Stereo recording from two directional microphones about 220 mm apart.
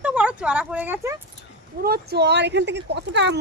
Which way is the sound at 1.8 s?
45° right (ahead or behind).